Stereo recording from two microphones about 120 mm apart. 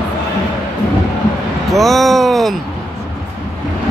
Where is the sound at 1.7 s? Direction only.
Centre (ahead or behind).